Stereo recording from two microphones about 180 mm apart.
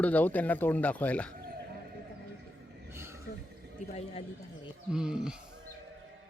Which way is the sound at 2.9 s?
15° right (ahead or behind).